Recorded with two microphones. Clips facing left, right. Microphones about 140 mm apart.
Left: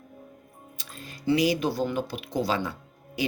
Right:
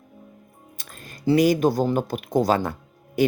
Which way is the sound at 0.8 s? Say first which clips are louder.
Left 1 dB; 50° right (ahead or behind).